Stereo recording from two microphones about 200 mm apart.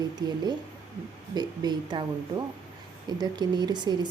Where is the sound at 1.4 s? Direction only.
20° right (ahead or behind).